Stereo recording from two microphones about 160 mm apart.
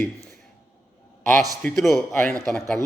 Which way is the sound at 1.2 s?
5° left (ahead or behind).